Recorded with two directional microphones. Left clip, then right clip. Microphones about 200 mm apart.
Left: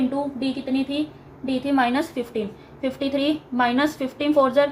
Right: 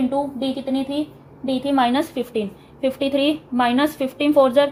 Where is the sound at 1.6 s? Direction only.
25° right (ahead or behind).